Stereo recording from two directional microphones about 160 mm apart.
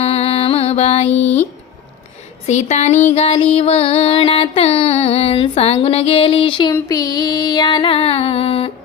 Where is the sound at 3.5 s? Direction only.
40° left (ahead or behind).